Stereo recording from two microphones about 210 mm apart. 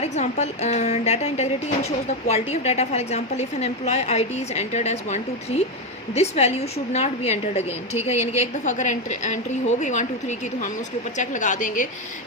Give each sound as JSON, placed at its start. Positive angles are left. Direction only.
{"t": 0.0, "sound": "a woman's voice", "side_deg": 30}